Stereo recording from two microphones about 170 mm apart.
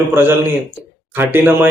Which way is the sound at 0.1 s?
15° right (ahead or behind).